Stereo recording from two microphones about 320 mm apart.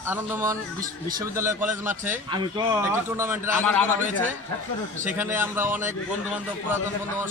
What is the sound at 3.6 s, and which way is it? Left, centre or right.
Speech, centre.